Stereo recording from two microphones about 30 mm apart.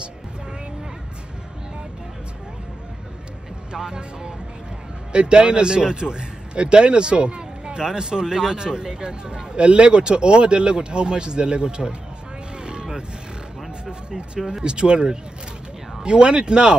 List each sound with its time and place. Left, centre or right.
3.7 s a man's voice: right
12.5 s vehicle: right
13.8 s speech: right